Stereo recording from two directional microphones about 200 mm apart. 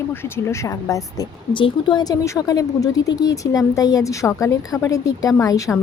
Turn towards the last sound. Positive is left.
turn(degrees=15)  # may be behind; listen again after turning